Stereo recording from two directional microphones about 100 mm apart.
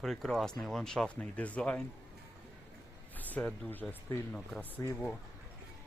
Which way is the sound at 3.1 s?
15° left (ahead or behind).